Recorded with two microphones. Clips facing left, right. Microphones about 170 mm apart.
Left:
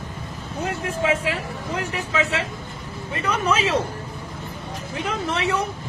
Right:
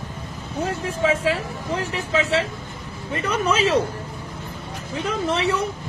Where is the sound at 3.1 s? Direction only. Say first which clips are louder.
Right 1 dB; 35° right (ahead or behind).